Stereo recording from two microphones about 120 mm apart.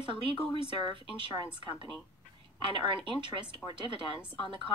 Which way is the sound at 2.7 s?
45° right (ahead or behind).